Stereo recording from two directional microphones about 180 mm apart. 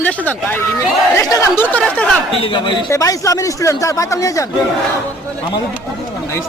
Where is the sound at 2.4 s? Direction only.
25° left (ahead or behind).